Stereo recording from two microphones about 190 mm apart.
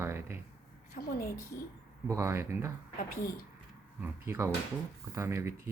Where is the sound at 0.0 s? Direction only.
15° right (ahead or behind).